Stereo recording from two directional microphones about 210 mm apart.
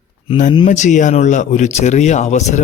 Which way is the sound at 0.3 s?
35° left (ahead or behind).